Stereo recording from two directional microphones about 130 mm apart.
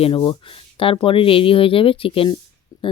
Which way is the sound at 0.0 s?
40° left (ahead or behind).